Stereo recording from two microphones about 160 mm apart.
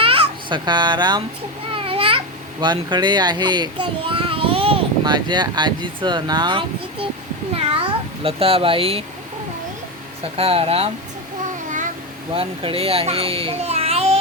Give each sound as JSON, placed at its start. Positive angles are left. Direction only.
{"t": 0.0, "sound": "a sound", "side_deg": -35}
{"t": 1.7, "sound": "a child's voice", "side_deg": -35}
{"t": 10.3, "sound": "speech", "side_deg": -35}
{"t": 12.3, "sound": "a child's voice", "side_deg": -35}